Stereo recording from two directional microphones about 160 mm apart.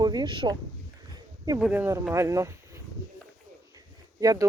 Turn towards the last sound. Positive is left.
turn(degrees=-20)  # may be behind; listen again after turning